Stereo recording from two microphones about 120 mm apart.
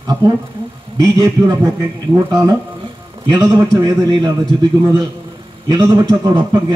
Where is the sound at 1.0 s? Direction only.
30° right (ahead or behind).